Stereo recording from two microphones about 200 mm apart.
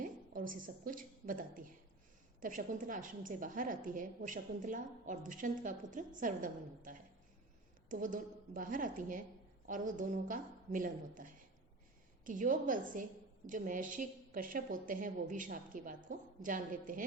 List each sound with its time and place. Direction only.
0.0 s a woman's voice: 45° right (ahead or behind)